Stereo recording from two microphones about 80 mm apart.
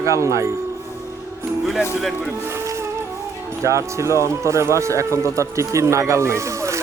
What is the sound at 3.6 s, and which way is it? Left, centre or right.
Speech, right.